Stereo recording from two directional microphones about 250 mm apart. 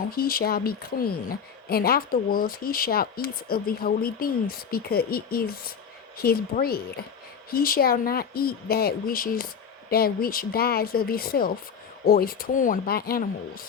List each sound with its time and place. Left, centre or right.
0.1 s a woman's voice: left